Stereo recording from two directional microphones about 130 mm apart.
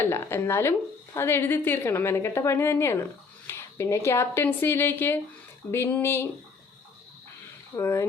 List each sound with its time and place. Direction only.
0.0 s a woman's voice: 15° left (ahead or behind)
7.8 s speech: 20° left (ahead or behind)